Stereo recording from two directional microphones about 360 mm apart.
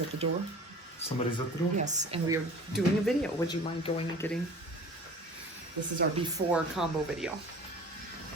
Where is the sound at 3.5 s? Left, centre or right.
Centre.